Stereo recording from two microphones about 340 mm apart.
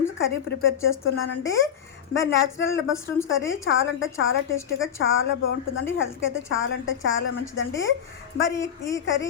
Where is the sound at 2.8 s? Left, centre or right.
Centre.